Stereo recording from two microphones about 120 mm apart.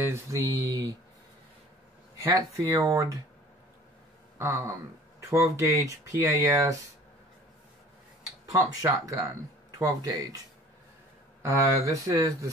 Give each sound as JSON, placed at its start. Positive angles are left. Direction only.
{"t": 0.0, "sound": "speech", "side_deg": -25}
{"t": 2.1, "sound": "speech", "side_deg": -25}
{"t": 4.4, "sound": "speech", "side_deg": -25}
{"t": 8.5, "sound": "speech", "side_deg": -25}
{"t": 11.4, "sound": "speech", "side_deg": -30}